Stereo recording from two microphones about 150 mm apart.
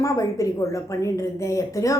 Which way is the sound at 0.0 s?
20° left (ahead or behind).